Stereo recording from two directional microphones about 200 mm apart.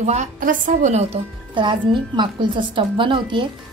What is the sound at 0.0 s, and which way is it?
A woman's voice, 35° right (ahead or behind).